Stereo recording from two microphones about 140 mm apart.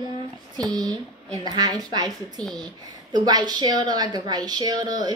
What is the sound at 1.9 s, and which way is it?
A woman's voice, 30° right (ahead or behind).